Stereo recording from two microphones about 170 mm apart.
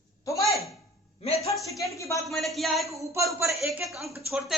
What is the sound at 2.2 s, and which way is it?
Speech, centre (ahead or behind).